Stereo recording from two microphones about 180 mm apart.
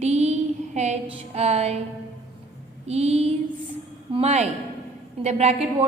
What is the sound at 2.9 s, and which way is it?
A woman's voice, 35° right (ahead or behind).